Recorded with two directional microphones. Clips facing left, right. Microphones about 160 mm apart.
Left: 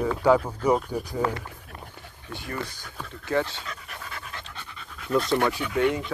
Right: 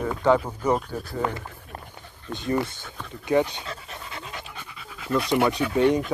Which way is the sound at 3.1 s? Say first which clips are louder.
Right 4 dB; 15° right (ahead or behind).